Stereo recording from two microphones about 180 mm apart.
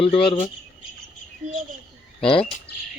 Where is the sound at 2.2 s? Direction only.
30° left (ahead or behind).